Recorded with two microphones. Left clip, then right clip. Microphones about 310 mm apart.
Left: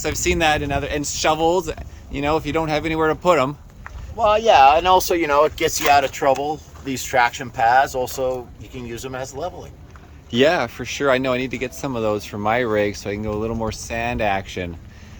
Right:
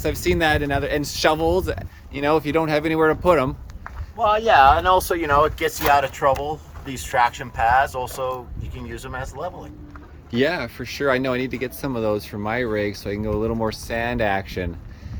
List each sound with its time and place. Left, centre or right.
0.0 s speech: centre
4.2 s speech: left
10.3 s speech: centre